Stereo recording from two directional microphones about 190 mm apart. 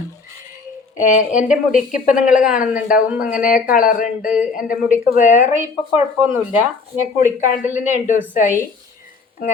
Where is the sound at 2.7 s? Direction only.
5° right (ahead or behind).